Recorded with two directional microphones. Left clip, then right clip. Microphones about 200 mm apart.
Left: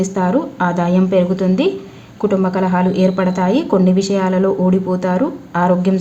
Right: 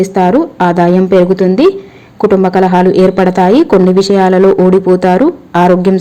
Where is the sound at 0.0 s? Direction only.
30° right (ahead or behind).